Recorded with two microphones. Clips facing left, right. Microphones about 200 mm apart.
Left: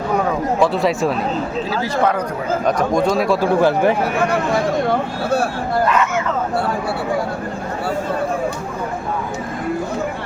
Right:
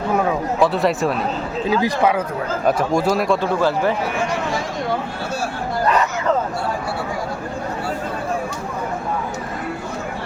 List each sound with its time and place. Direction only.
0.1 s speech: 5° right (ahead or behind)
1.7 s speech: 15° right (ahead or behind)
3.4 s speech: 15° left (ahead or behind)
4.2 s speech: 60° left (ahead or behind)
5.9 s speech: 35° right (ahead or behind)